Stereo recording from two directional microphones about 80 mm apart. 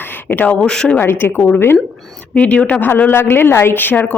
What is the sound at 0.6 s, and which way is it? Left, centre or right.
Speech, centre.